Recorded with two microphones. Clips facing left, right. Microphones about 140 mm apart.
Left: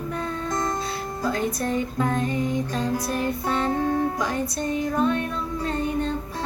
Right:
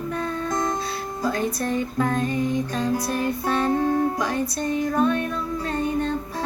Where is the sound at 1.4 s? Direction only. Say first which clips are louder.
Even; 20° left (ahead or behind).